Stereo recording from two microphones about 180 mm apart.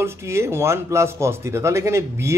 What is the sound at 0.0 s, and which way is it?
Speech, 15° right (ahead or behind).